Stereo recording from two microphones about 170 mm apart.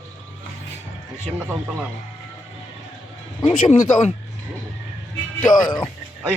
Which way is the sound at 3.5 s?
40° left (ahead or behind).